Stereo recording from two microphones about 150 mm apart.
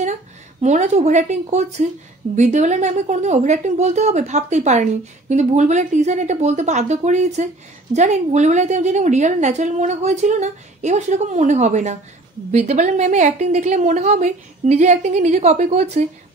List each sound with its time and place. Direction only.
0.0 s a woman's voice: 50° right (ahead or behind)